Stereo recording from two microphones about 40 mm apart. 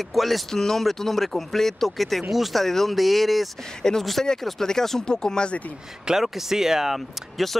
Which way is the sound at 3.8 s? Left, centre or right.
Centre.